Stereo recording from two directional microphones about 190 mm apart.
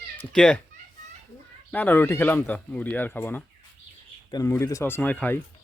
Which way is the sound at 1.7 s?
10° left (ahead or behind).